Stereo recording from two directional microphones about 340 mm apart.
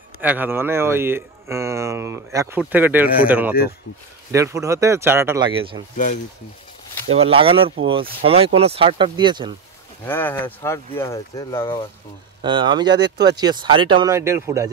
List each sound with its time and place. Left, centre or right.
0.2 s speech: centre
7.1 s speech: centre
10.0 s speech: centre
12.4 s speech: centre